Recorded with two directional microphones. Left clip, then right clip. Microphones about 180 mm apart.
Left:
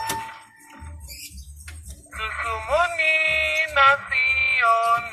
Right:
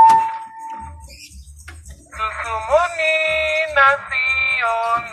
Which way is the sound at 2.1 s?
45° left (ahead or behind).